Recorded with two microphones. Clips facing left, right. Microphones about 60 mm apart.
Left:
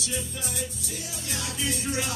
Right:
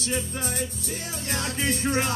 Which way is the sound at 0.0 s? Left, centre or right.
Right.